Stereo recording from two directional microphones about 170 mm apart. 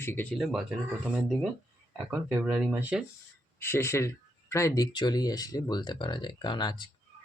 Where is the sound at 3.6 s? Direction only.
15° left (ahead or behind).